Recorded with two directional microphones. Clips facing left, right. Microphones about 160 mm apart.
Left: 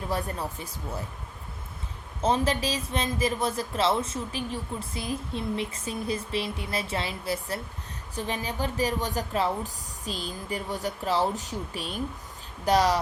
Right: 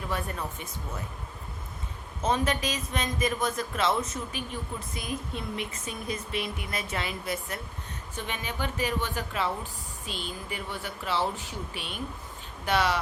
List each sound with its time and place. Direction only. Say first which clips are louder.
0.1 s speech: left 3 dB; 35° left (ahead or behind)
2.2 s speech: left 2 dB; 30° left (ahead or behind)